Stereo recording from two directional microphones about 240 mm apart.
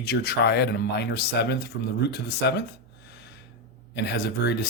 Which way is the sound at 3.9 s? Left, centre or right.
Left.